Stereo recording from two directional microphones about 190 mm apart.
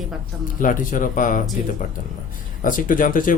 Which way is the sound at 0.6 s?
45° left (ahead or behind).